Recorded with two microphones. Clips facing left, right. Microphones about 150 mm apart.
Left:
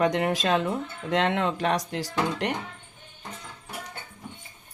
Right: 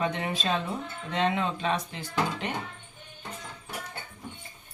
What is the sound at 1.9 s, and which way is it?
Speech, 85° left.